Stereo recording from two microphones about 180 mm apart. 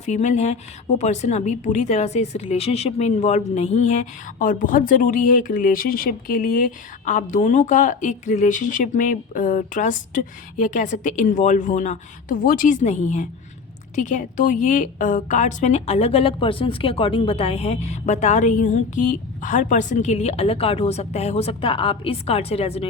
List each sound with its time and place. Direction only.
0.0 s a woman's voice: 40° left (ahead or behind)